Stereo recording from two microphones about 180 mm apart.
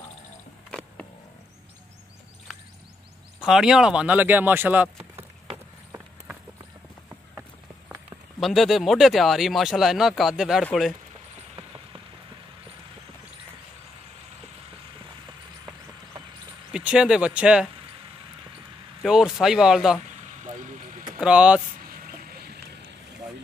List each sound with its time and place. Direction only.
0.7 s a sound: 5° left (ahead or behind)
3.3 s speech: 5° right (ahead or behind)
8.4 s speech: centre (ahead or behind)
16.7 s speech: 5° right (ahead or behind)
19.0 s speech: 5° right (ahead or behind)
21.2 s speech: 5° right (ahead or behind)
22.3 s a sound: 60° right (ahead or behind)